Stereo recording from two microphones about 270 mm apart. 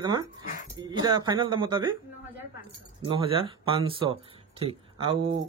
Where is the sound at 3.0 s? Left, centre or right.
Centre.